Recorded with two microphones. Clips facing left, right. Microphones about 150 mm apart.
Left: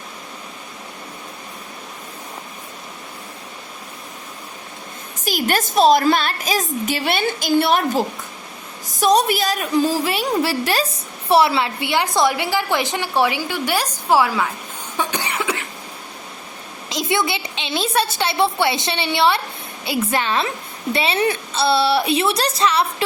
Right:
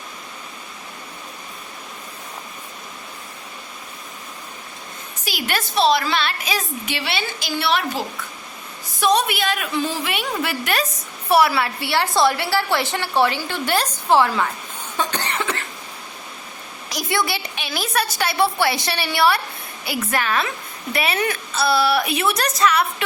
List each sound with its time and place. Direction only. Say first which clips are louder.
5.2 s a woman's voice: left 5 dB; 45° left (ahead or behind); by 14.5 s 5° left (ahead or behind)
14.9 s cough: left 1 dB; 10° left (ahead or behind)
16.9 s a woman's voice: left 2 dB; 20° left (ahead or behind)